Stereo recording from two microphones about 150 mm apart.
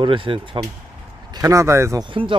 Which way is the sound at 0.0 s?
35° right (ahead or behind).